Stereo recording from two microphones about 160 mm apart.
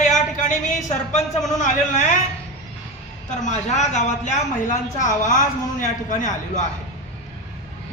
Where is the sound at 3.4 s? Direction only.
45° left (ahead or behind).